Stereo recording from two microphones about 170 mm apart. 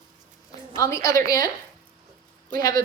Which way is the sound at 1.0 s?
60° right (ahead or behind).